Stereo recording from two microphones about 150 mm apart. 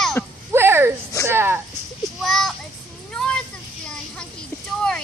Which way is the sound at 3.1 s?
5° left (ahead or behind).